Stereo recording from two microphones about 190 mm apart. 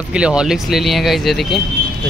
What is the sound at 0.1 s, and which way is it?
Speech, 5° right (ahead or behind).